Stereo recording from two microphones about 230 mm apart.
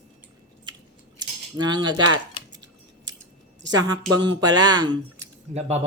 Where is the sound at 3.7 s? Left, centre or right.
Centre.